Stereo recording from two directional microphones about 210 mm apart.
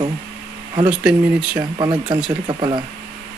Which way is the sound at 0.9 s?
5° right (ahead or behind).